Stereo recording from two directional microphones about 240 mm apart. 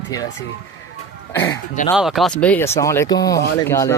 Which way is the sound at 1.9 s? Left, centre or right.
Centre.